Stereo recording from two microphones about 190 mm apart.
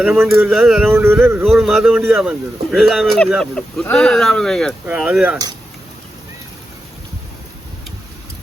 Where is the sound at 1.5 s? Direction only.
Centre (ahead or behind).